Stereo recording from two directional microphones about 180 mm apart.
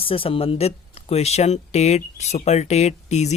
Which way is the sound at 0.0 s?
30° left (ahead or behind).